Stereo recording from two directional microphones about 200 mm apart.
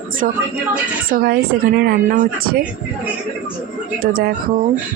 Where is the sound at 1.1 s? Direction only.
50° right (ahead or behind).